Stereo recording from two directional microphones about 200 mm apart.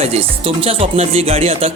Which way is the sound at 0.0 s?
30° right (ahead or behind).